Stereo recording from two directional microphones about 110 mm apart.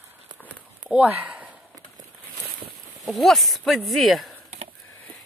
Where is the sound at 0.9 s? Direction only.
10° right (ahead or behind).